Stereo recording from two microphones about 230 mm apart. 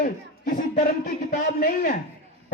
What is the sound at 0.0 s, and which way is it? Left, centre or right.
Speech, left.